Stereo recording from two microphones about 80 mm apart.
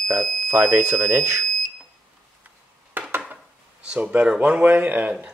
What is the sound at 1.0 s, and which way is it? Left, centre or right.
Speech, right.